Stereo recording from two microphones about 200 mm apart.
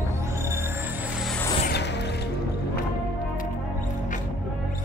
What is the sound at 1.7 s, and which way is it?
Music, 60° left (ahead or behind).